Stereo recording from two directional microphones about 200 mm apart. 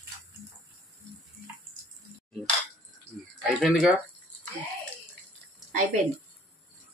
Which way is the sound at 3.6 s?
5° right (ahead or behind).